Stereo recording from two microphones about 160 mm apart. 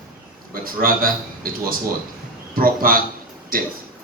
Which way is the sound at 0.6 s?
65° right (ahead or behind).